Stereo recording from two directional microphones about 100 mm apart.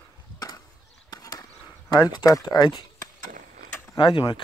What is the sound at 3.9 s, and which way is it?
Speech, 55° left (ahead or behind).